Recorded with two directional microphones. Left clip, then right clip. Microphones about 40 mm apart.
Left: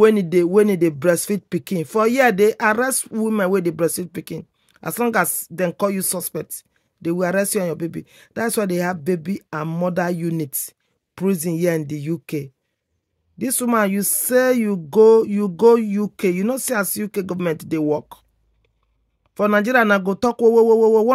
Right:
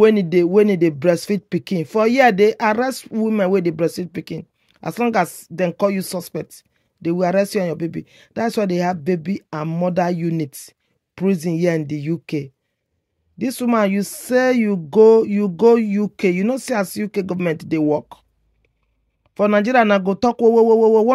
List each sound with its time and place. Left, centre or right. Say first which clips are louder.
0.0 s speech: right 1 dB; left
2.9 s speech: right 1 dB; left
3.3 s speech: right 1 dB; left
5.1 s speech: right 1 dB; left
11.9 s speech: right 2 dB; left
13.4 s speech: right 1 dB; left
14.3 s speech: even; left
16.4 s speech: right 1 dB; left
19.3 s speech: right 1 dB; left
20.0 s speech: right 1 dB; left